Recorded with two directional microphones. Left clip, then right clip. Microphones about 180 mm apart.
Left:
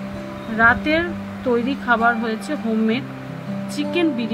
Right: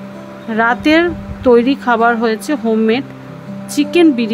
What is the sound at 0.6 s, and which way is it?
A woman's voice, 65° right (ahead or behind).